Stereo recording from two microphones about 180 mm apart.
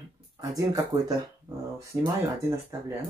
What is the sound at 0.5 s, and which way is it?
Speech, 20° right (ahead or behind).